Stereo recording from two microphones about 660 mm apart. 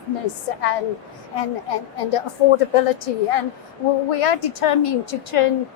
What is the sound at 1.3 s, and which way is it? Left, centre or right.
A woman's voice, left.